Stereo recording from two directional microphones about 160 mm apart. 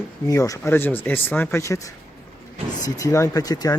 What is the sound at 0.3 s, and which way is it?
Speech, 20° left (ahead or behind).